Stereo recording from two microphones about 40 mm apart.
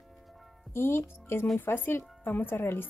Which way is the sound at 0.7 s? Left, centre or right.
Left.